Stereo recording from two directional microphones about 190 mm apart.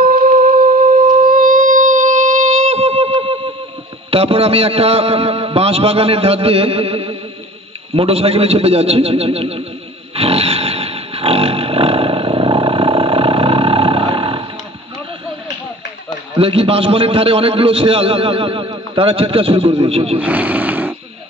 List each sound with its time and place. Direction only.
0.0 s music: 50° right (ahead or behind); by 3.3 s 30° right (ahead or behind)
4.1 s a man's voice: 30° right (ahead or behind)
10.1 s roaring cats: 30° right (ahead or behind)
16.3 s a man's voice: 30° right (ahead or behind)
20.2 s speech: 10° right (ahead or behind)